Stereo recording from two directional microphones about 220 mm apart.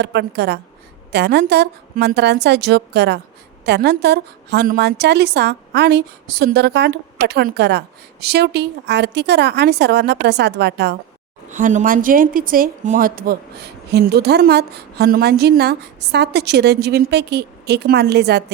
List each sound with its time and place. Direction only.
0.0 s a woman's voice: 50° right (ahead or behind)
11.5 s a woman's voice: 35° right (ahead or behind)